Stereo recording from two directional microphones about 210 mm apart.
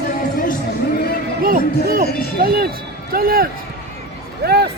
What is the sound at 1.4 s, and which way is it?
Speech, 45° right (ahead or behind).